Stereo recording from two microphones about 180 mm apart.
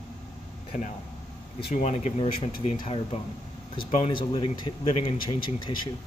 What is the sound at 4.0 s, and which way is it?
Speech, 30° left (ahead or behind).